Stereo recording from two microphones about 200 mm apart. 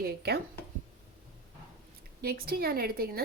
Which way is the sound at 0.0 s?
55° right (ahead or behind).